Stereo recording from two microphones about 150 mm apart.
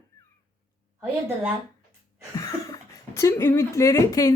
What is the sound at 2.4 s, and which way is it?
Speech, 25° left (ahead or behind).